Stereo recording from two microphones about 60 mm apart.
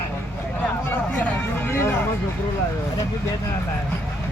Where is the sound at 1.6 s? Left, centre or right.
Left.